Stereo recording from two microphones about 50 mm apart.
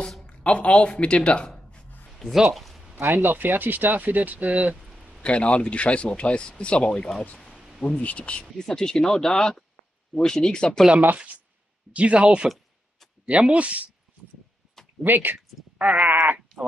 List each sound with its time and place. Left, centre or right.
0.3 s speech: left
2.0 s a sound: centre
3.0 s speech: right
4.7 s a sound: centre
5.2 s speech: left
7.5 s a sound: centre
8.0 s speech: left
8.6 s speech: centre
11.1 s speech: right
15.0 s speech: right
15.3 s speech: right